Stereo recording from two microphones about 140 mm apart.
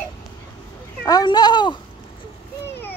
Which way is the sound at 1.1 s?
30° left (ahead or behind).